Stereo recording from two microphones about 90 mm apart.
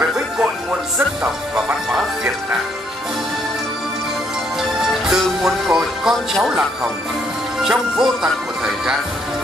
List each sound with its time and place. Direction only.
0.0 s music: 15° right (ahead or behind)
1.5 s speech: 5° right (ahead or behind)
4.6 s music: 5° right (ahead or behind)
5.4 s speech: 5° right (ahead or behind)
7.6 s speech: 5° right (ahead or behind)